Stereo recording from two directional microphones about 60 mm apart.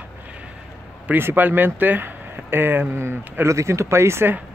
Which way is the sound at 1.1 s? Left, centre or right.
Right.